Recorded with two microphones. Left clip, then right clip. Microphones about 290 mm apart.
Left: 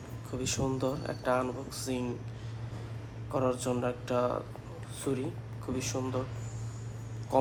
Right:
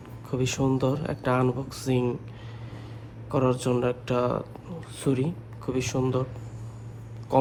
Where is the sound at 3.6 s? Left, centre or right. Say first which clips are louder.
Right 6 dB; right.